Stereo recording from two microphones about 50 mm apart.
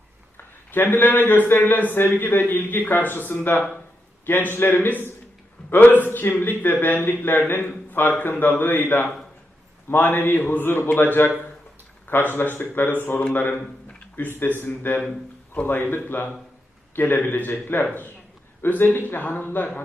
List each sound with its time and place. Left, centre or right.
0.3 s a man's voice: left